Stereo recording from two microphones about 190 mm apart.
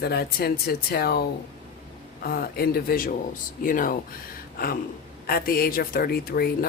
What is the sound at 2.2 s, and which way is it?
Speech, 55° left (ahead or behind).